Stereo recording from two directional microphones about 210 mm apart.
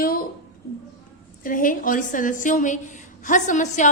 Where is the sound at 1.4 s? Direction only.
40° left (ahead or behind).